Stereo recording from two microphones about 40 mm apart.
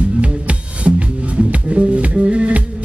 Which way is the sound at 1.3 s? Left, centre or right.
Right.